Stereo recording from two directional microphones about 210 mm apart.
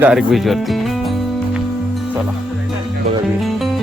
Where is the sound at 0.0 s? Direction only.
5° right (ahead or behind).